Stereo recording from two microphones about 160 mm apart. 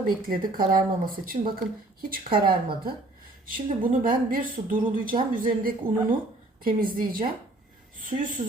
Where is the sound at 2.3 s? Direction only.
65° right (ahead or behind).